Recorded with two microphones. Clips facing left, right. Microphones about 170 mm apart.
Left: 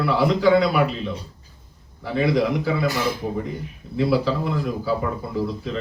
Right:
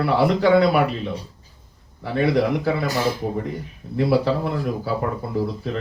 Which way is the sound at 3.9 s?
55° right (ahead or behind).